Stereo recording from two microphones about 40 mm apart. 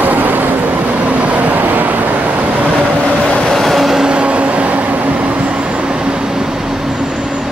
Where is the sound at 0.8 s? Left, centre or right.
Right.